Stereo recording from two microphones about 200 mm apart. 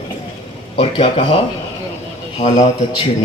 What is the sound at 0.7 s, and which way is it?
A man's voice, 30° left (ahead or behind).